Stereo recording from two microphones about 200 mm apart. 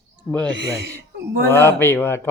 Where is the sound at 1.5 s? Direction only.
10° left (ahead or behind).